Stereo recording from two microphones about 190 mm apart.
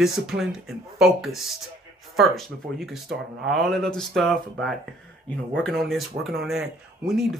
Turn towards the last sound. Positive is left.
turn(degrees=0)  # may be behind; listen again after turning